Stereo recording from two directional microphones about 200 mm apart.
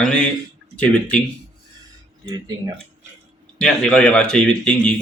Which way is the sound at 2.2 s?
20° right (ahead or behind).